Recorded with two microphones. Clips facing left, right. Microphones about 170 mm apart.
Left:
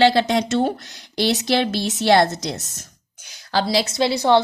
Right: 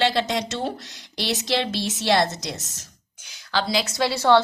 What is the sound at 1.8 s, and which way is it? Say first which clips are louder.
Speech: left 5 dB; 60° left (ahead or behind).